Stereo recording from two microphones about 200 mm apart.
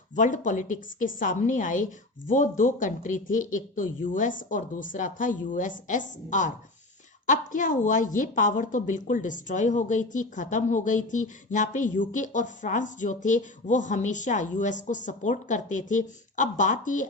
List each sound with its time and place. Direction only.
0.2 s a woman's voice: 40° left (ahead or behind)